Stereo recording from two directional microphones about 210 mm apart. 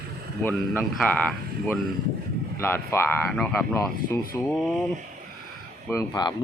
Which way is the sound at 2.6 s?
10° left (ahead or behind).